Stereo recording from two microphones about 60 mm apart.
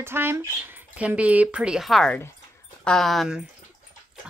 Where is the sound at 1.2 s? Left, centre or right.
Right.